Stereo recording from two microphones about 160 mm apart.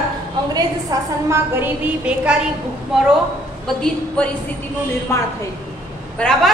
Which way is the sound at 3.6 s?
5° left (ahead or behind).